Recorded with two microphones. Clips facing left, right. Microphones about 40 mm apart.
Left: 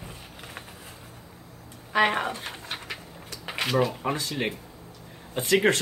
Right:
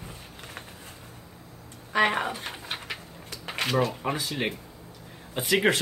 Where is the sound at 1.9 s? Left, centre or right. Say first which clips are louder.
Left 1 dB; centre.